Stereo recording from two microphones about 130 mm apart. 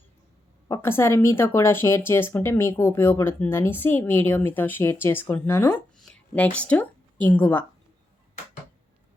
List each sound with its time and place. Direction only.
0.7 s speech: 20° left (ahead or behind)